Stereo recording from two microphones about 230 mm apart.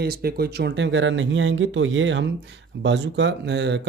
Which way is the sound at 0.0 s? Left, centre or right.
Right.